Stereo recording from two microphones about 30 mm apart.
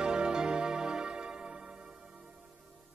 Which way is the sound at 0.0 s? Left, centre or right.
Right.